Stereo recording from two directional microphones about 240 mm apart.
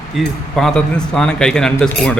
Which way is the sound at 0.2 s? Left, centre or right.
Centre.